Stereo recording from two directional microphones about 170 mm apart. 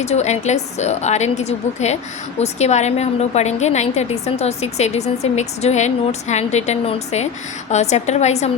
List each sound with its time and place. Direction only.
0.0 s a woman's voice: 40° left (ahead or behind)